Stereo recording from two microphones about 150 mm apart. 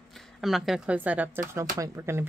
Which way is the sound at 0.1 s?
Centre (ahead or behind).